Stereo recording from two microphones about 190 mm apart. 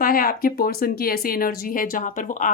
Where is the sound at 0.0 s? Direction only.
50° left (ahead or behind).